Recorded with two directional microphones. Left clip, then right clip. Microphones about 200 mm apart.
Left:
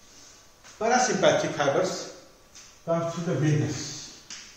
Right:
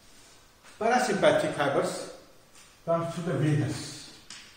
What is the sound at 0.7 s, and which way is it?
A man's voice, 5° right (ahead or behind).